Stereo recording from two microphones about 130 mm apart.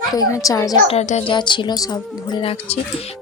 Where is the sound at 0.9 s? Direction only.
55° left (ahead or behind).